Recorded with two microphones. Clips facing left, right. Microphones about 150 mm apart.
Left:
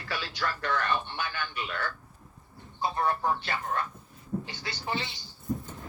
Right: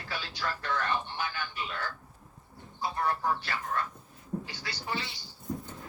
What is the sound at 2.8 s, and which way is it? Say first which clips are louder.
Speech: left 2 dB; 25° left (ahead or behind).